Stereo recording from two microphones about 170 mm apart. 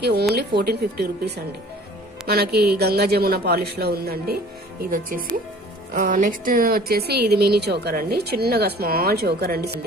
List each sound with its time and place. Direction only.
0.0 s a woman's voice: 75° right (ahead or behind)
7.1 s a woman's voice: 70° right (ahead or behind)